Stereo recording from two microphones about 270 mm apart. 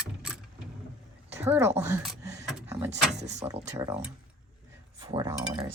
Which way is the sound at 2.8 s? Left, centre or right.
Right.